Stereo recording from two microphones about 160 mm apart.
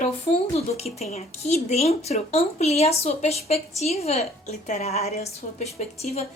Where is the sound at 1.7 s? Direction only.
40° left (ahead or behind).